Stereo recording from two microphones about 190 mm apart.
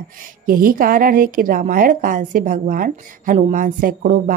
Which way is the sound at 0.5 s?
50° right (ahead or behind).